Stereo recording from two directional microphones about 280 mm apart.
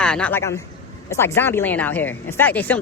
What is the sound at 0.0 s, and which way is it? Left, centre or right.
A man's voice, centre.